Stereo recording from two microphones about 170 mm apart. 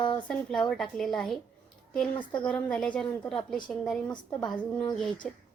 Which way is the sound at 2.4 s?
5° left (ahead or behind).